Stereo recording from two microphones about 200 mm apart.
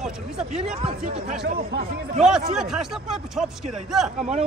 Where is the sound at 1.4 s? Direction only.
55° right (ahead or behind).